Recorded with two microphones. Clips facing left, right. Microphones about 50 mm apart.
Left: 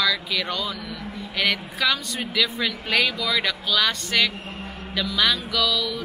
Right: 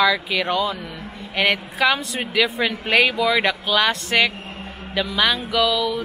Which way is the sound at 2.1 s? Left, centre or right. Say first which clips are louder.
Right 4 dB; right.